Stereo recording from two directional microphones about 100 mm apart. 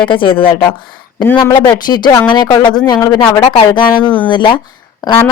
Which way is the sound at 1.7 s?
45° left (ahead or behind).